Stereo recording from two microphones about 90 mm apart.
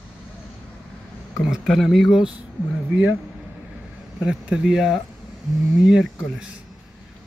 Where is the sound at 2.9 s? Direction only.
15° right (ahead or behind).